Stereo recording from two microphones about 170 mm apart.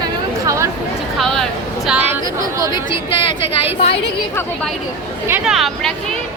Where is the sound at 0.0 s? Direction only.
20° right (ahead or behind).